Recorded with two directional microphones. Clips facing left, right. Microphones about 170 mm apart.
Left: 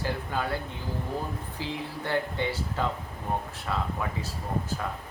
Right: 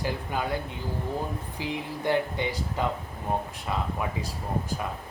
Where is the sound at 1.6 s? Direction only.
15° right (ahead or behind).